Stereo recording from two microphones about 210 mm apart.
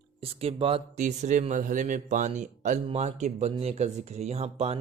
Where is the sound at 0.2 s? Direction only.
25° right (ahead or behind).